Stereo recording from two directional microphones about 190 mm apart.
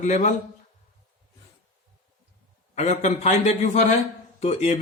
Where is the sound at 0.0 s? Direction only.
40° left (ahead or behind).